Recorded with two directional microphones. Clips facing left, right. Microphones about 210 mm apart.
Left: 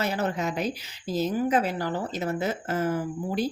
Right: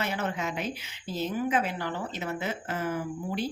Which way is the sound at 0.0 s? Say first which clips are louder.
Left 4 dB; 40° left (ahead or behind).